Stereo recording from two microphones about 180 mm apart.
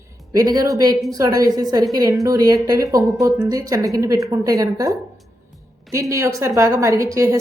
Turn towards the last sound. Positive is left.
turn(degrees=-15)  # may be behind; listen again after turning